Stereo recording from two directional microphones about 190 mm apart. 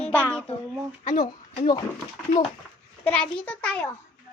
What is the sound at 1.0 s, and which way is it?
Speech, 45° left (ahead or behind).